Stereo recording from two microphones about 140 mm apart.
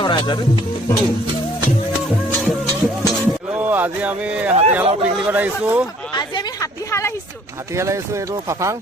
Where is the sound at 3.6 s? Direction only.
10° right (ahead or behind).